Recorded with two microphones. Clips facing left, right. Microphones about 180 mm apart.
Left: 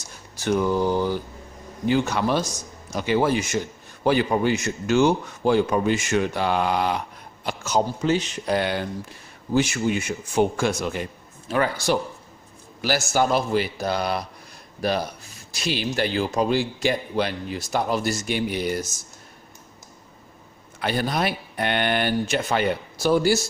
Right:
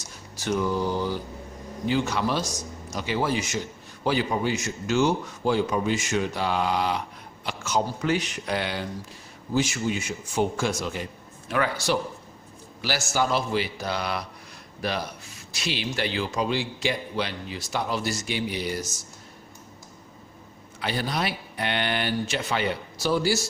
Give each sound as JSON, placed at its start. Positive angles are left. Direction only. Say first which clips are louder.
{"t": 0.4, "sound": "a man's voice", "louder": "left 4 dB", "side_deg": 55}
{"t": 1.9, "sound": "a man's voice", "louder": "left 4 dB", "side_deg": 55}
{"t": 7.4, "sound": "a sound", "louder": "left 3 dB", "side_deg": 40}
{"t": 8.0, "sound": "speech", "louder": "left 3 dB", "side_deg": 25}
{"t": 8.5, "sound": "a man's voice", "louder": "left 5 dB", "side_deg": 50}
{"t": 11.4, "sound": "speech", "louder": "left 3 dB", "side_deg": 30}
{"t": 12.8, "sound": "a man's voice", "louder": "left 4 dB", "side_deg": 50}
{"t": 20.7, "sound": "a man's voice", "louder": "left 4 dB", "side_deg": 50}